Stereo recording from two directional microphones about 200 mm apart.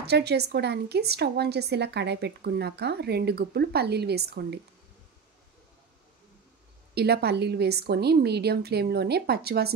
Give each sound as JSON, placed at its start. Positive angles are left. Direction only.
{"t": 0.0, "sound": "a woman's voice", "side_deg": -55}
{"t": 7.0, "sound": "a woman's voice", "side_deg": -55}